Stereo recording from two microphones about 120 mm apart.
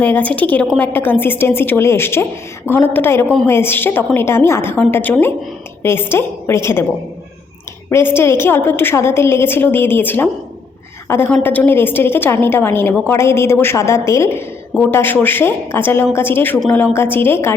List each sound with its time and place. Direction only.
0.0 s a woman's voice: 15° left (ahead or behind)
7.9 s a woman's voice: 20° left (ahead or behind)
11.4 s a woman's voice: 15° left (ahead or behind)